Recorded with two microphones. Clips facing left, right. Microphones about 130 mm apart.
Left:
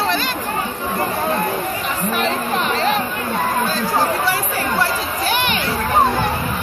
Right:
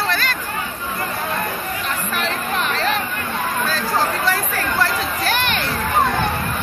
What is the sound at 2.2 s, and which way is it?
Chatter, 15° left (ahead or behind).